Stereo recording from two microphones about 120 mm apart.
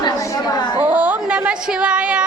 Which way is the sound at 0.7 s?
15° right (ahead or behind).